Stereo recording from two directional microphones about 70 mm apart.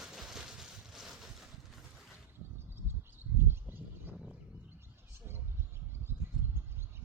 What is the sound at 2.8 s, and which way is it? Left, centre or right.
Bird, right.